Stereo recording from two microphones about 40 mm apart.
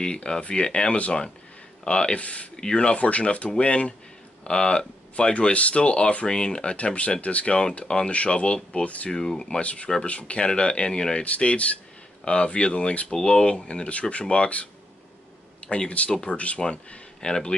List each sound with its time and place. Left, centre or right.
0.0 s speech: left
2.5 s speech: left
9.1 s speech: centre
9.6 s speech: left
11.2 s speech: left
13.1 s speech: left
15.9 s speech: left
17.2 s speech: left